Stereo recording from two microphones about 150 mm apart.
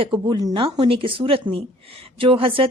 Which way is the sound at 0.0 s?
30° right (ahead or behind).